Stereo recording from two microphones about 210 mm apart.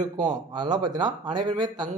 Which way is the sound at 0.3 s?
20° right (ahead or behind).